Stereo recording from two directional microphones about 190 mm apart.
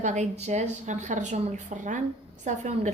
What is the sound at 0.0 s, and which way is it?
A woman's voice, 40° right (ahead or behind).